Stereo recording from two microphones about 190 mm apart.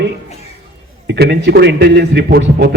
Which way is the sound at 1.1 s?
60° right (ahead or behind).